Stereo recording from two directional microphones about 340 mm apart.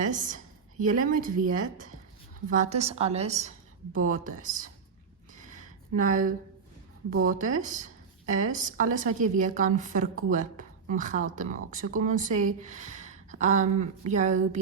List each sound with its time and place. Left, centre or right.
0.0 s speech: right
5.3 s a sound: right
6.0 s a woman's voice: right